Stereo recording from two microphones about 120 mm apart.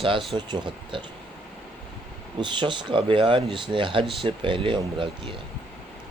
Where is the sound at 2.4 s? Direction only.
40° right (ahead or behind).